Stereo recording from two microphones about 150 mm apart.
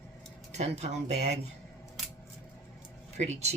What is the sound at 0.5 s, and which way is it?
Speech, 45° right (ahead or behind).